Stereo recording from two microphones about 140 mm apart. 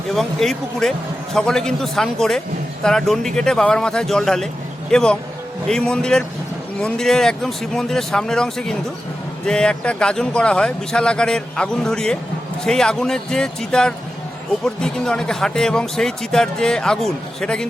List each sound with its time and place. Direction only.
0.1 s speech: centre (ahead or behind)